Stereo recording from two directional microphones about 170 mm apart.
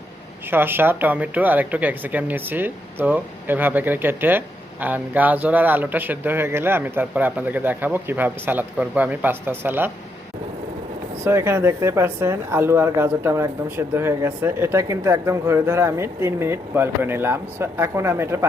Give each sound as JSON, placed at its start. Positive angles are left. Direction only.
{"t": 0.5, "sound": "speech", "side_deg": -10}
{"t": 11.3, "sound": "speech", "side_deg": -15}